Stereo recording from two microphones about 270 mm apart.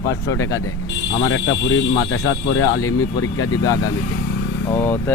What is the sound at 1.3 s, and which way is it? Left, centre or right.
Speech, left.